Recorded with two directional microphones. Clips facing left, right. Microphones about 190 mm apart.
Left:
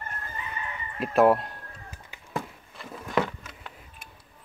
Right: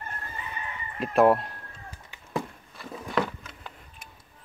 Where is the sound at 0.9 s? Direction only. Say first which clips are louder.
Even; centre (ahead or behind).